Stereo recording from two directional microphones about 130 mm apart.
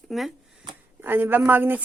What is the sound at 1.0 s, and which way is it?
Speech, 15° right (ahead or behind).